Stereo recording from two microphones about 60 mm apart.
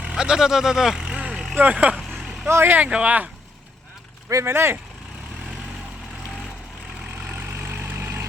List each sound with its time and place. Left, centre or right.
0.0 s vehicle: centre
1.5 s speech: right
2.0 s vehicle: centre
2.5 s speech: right
2.7 s speech: right
4.4 s speech: right
7.3 s vehicle: right